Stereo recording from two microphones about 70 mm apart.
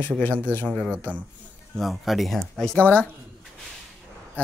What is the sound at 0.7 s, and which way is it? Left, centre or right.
Speech, centre.